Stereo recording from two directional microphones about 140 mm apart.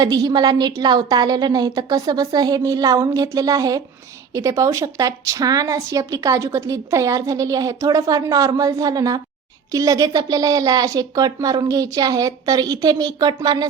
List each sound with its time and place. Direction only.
0.0 s a woman's voice: 25° right (ahead or behind)